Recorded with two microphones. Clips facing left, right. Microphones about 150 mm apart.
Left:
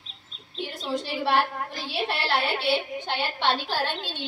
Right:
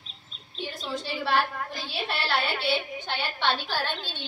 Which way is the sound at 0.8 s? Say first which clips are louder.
Left 4 dB; 15° left (ahead or behind).